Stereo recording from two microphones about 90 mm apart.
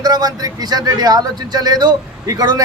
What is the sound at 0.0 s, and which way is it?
A man's voice, 45° right (ahead or behind).